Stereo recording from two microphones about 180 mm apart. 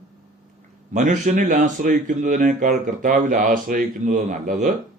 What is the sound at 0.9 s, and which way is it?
Speech, 40° right (ahead or behind).